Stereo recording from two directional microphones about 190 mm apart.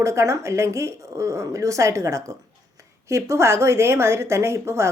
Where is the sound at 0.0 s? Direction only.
15° right (ahead or behind).